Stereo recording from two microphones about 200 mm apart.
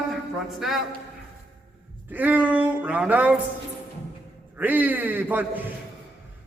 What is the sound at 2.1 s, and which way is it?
Speech, 10° right (ahead or behind).